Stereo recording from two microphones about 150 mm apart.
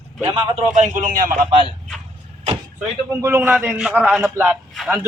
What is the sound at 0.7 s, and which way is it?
Speech, 55° right (ahead or behind).